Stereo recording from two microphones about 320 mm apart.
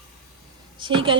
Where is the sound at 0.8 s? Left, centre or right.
Centre.